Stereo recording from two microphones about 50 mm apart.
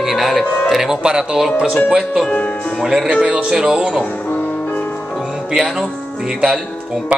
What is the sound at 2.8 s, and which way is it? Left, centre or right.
Speech, centre.